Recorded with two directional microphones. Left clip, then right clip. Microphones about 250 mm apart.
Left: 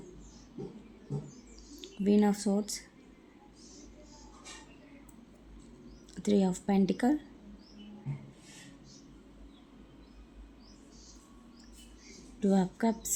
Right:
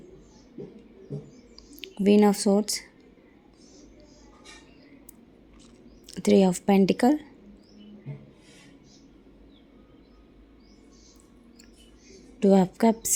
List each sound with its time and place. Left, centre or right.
1.8 s speech: right
6.1 s speech: right
12.4 s speech: right